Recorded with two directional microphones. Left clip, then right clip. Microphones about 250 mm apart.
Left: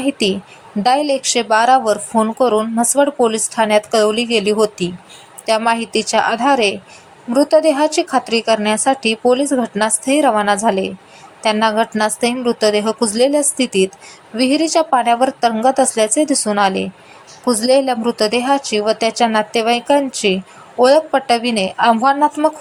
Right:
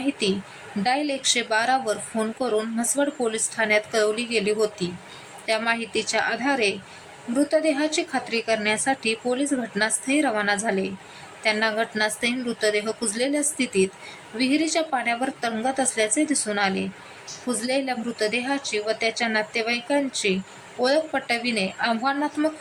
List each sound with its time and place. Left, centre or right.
0.0 s speech: centre